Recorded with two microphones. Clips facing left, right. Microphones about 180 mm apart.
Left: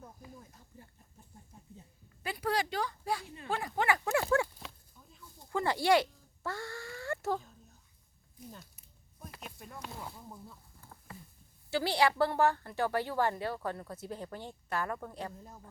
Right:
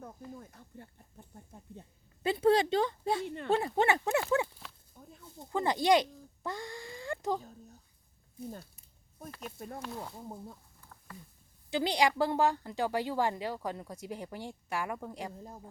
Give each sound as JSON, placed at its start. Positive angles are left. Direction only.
{"t": 2.2, "sound": "a woman's voice", "side_deg": -25}
{"t": 3.2, "sound": "speech", "side_deg": -65}
{"t": 3.5, "sound": "a woman's voice", "side_deg": -25}
{"t": 5.2, "sound": "a sound", "side_deg": -20}
{"t": 8.4, "sound": "speech", "side_deg": -30}
{"t": 9.6, "sound": "speech", "side_deg": -45}
{"t": 11.7, "sound": "a woman's voice", "side_deg": -15}